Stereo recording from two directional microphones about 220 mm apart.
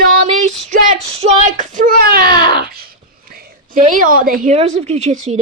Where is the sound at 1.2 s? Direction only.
35° right (ahead or behind).